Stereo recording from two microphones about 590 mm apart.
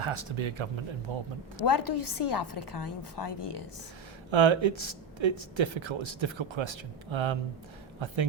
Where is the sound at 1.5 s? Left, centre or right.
Left.